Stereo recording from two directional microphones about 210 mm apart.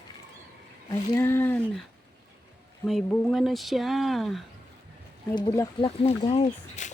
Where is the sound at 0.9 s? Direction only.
15° left (ahead or behind).